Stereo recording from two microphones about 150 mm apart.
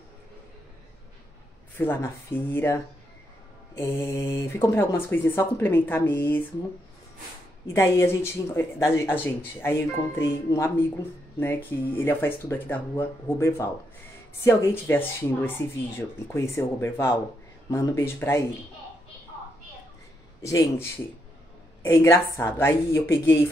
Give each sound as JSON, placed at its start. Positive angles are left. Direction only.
{"t": 1.8, "sound": "speech", "side_deg": 15}
{"t": 7.6, "sound": "speech", "side_deg": 20}
{"t": 20.4, "sound": "speech", "side_deg": 20}